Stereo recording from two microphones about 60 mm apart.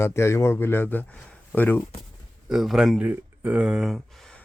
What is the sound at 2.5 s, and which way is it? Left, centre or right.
Speech, centre.